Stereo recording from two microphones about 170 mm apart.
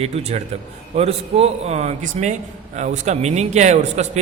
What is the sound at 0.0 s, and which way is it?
A man's voice, 40° right (ahead or behind).